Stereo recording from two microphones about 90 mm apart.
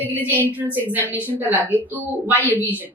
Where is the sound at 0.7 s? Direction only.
20° right (ahead or behind).